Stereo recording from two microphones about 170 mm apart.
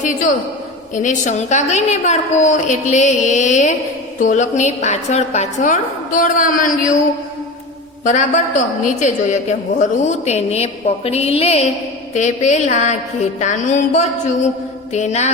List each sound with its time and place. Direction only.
0.0 s a woman's voice: 50° left (ahead or behind)
8.0 s a woman's voice: 50° left (ahead or behind)